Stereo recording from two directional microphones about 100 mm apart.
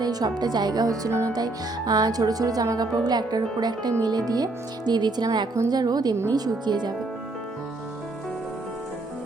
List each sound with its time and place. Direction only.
0.0 s speech: 40° right (ahead or behind)